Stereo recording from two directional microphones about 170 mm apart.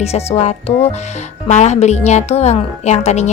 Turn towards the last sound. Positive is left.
turn(degrees=40)  # may be behind; listen again after turning